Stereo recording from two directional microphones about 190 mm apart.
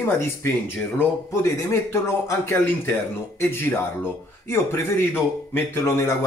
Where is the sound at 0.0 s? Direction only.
15° left (ahead or behind).